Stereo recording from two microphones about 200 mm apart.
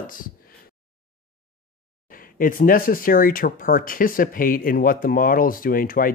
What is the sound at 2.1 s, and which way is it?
Speech, 45° left (ahead or behind).